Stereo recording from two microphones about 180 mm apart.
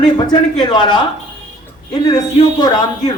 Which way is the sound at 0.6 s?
25° left (ahead or behind).